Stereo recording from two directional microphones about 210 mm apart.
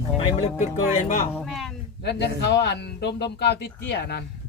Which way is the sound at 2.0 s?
50° left (ahead or behind).